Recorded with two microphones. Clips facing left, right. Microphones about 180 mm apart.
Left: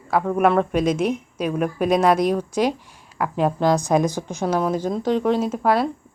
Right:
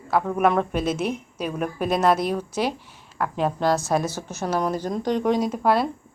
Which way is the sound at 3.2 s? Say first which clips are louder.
Left 3 dB; 5° left (ahead or behind).